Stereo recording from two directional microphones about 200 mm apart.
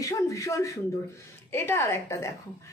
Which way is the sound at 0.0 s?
15° left (ahead or behind).